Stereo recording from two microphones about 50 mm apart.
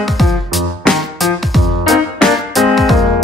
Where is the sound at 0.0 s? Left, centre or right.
Centre.